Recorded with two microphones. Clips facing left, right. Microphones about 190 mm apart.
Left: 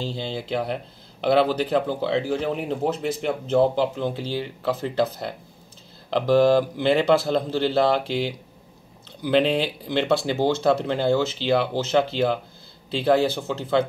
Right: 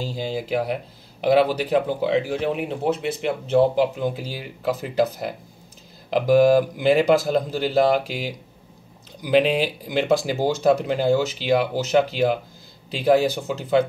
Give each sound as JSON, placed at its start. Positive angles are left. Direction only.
{"t": 0.0, "sound": "speech", "side_deg": -10}